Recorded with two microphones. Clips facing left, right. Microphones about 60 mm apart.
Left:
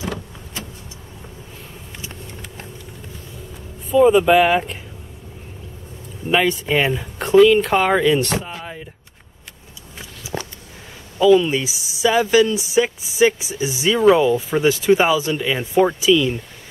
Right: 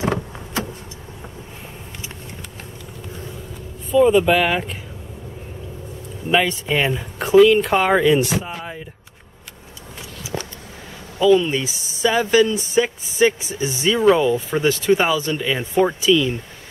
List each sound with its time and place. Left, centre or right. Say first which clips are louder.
3.9 s speech: left 2 dB; centre
6.3 s speech: left 1 dB; centre
11.1 s speech: left 2 dB; centre